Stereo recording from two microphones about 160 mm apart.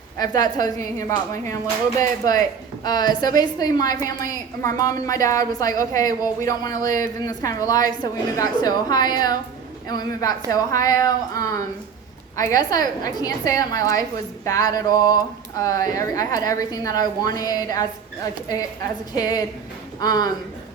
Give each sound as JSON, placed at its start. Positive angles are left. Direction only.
{"t": 0.2, "sound": "a woman's voice", "side_deg": 25}
{"t": 19.1, "sound": "a woman's voice", "side_deg": 25}